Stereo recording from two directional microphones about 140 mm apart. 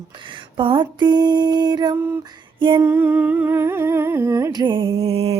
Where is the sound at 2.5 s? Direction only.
35° right (ahead or behind).